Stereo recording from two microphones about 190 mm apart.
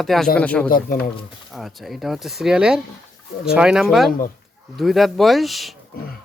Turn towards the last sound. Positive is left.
turn(degrees=0)  # may be behind; listen again after turning